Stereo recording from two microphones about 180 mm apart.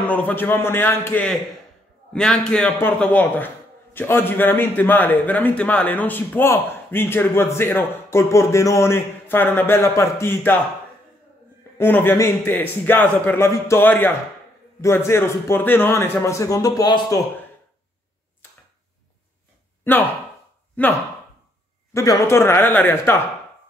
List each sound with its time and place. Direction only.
0.0 s a man's voice: 10° left (ahead or behind)
11.8 s a man's voice: 10° left (ahead or behind)
19.8 s a man's voice: 10° left (ahead or behind)
21.9 s a man's voice: 15° left (ahead or behind)